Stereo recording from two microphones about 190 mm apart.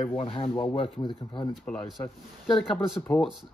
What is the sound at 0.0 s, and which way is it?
Speech, 30° left (ahead or behind).